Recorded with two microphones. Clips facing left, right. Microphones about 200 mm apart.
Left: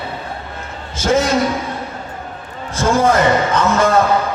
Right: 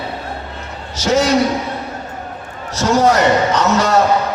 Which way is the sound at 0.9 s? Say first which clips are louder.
Right 1 dB; 50° left (ahead or behind).